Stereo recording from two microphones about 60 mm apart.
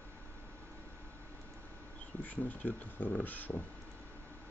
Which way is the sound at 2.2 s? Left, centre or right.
Left.